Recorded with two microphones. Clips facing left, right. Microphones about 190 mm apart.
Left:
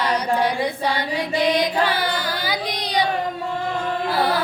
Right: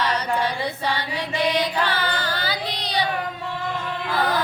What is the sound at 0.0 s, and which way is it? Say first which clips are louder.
Female singing: left 3 dB; 10° left (ahead or behind).